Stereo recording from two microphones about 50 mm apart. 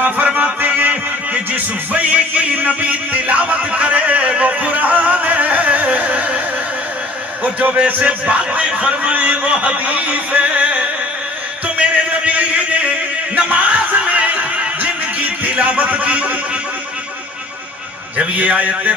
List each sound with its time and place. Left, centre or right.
0.0 s music: right
8.0 s speech: right
11.6 s a sound: right
18.1 s speech: right